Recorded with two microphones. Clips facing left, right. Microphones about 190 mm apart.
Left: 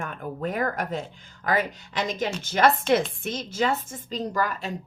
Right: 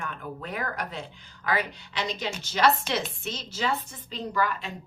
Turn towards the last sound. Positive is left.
turn(degrees=40)  # may be behind; listen again after turning